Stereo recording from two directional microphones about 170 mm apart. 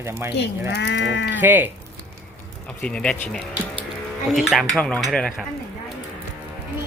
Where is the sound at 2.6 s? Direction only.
5° left (ahead or behind).